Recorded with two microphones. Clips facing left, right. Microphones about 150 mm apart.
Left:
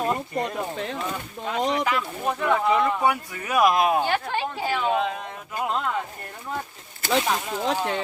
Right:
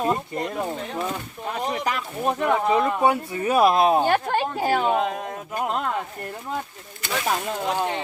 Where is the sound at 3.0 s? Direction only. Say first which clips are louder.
Right 3 dB; 30° right (ahead or behind).